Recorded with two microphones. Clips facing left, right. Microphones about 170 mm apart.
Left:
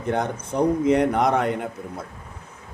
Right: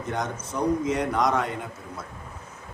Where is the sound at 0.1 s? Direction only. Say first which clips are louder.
Left 6 dB; 60° left (ahead or behind).